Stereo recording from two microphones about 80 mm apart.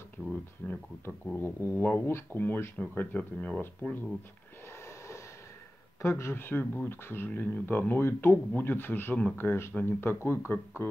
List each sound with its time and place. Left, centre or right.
0.7 s speech: left
4.8 s a sound: left
6.0 s speech: left